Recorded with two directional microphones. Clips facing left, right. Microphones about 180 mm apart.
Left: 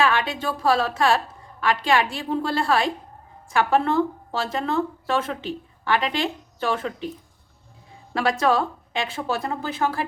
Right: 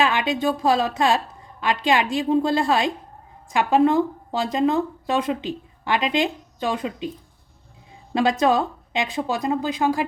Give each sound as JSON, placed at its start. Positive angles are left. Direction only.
{"t": 0.0, "sound": "a woman's voice", "side_deg": -20}
{"t": 8.1, "sound": "speech", "side_deg": -20}